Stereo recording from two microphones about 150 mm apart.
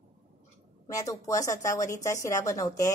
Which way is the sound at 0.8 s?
25° left (ahead or behind).